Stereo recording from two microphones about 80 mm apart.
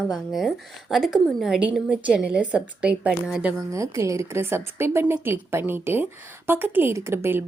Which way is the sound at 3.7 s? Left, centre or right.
Right.